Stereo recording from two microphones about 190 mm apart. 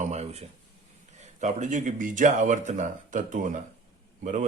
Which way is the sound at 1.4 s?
40° right (ahead or behind).